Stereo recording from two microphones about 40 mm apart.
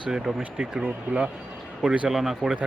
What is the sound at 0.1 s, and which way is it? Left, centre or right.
Speech, centre.